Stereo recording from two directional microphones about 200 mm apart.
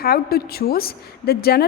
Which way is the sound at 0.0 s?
50° left (ahead or behind).